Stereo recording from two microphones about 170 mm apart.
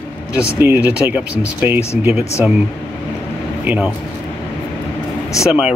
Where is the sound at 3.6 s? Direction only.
10° right (ahead or behind).